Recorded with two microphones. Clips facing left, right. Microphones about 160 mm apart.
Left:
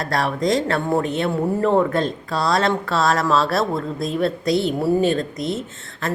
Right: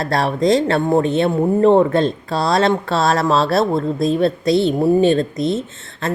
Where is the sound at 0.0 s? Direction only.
30° right (ahead or behind).